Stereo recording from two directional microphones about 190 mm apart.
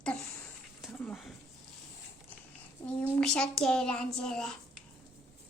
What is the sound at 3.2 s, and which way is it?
A child's voice, 5° left (ahead or behind).